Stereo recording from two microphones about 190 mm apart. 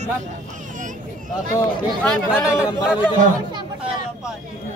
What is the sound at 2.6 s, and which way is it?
Speech, 5° right (ahead or behind).